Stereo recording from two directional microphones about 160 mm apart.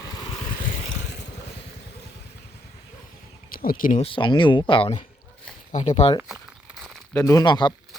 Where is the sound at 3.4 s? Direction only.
65° left (ahead or behind).